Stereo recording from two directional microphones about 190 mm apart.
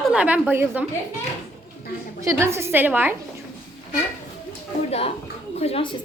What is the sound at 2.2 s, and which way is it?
Speech, 15° right (ahead or behind).